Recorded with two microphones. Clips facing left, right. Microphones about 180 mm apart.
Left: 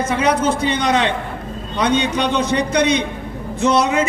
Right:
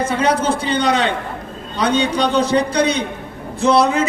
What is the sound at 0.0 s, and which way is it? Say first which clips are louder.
A man's voice: even; 30° right (ahead or behind).